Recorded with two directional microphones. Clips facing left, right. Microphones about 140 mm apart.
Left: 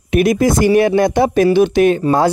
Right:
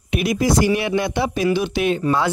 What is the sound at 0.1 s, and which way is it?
Speech, 50° left (ahead or behind).